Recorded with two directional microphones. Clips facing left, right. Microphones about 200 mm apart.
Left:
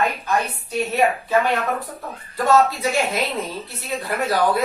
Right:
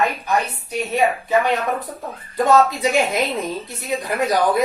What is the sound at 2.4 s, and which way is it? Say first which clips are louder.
Speech: right 2 dB; 20° right (ahead or behind).